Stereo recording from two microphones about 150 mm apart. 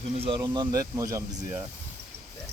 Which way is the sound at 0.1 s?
40° right (ahead or behind).